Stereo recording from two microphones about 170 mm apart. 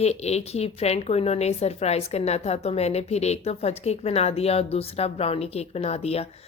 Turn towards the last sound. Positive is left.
turn(degrees=35)  # may be behind; listen again after turning